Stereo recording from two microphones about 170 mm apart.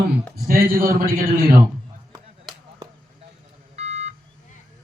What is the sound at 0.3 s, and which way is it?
Speech, 60° right (ahead or behind).